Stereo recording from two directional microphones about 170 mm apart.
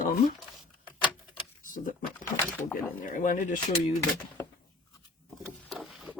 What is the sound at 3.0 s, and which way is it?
Speech, 50° left (ahead or behind).